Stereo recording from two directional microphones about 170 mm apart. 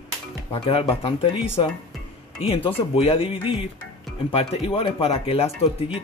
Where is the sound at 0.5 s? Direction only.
35° left (ahead or behind).